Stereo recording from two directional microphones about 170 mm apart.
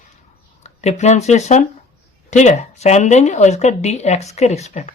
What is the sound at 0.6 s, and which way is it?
Speech, 40° left (ahead or behind).